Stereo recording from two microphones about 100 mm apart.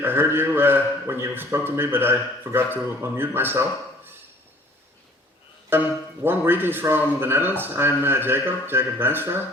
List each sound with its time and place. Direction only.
0.0 s a man's voice: 25° right (ahead or behind)
5.7 s a man's voice: 20° right (ahead or behind)